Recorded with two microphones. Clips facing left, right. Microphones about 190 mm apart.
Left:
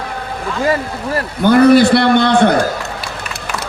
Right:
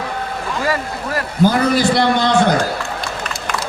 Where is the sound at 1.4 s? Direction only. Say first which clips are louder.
Left 7 dB; 60° left (ahead or behind).